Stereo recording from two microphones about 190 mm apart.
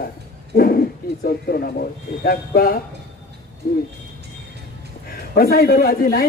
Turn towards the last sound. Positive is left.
turn(degrees=50)  # may be behind; listen again after turning